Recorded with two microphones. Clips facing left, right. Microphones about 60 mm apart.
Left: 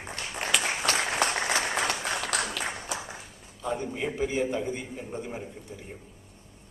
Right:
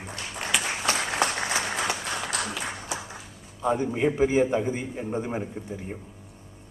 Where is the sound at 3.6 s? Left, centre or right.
Right.